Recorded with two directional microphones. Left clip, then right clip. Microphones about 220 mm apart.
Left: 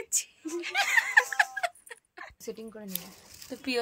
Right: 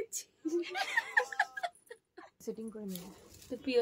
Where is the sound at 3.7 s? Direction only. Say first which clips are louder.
Right 1 dB; 15° left (ahead or behind).